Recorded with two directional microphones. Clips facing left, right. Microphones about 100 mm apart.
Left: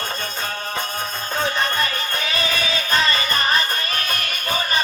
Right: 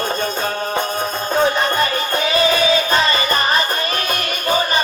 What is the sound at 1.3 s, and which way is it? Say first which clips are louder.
Music: right 7 dB; 45° right (ahead or behind).